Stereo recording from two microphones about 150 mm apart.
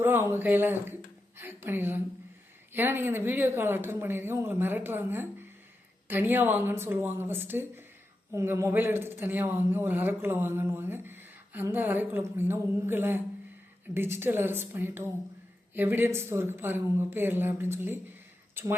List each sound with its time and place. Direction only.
0.0 s speech: 15° right (ahead or behind)